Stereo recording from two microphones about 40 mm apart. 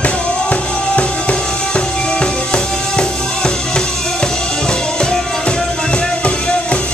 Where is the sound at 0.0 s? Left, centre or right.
Left.